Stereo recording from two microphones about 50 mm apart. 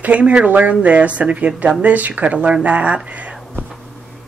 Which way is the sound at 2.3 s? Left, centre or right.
Centre.